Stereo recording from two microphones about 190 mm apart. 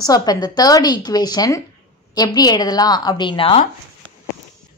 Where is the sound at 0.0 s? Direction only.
20° left (ahead or behind).